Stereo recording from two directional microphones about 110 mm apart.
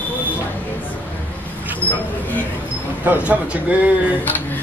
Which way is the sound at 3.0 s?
15° right (ahead or behind).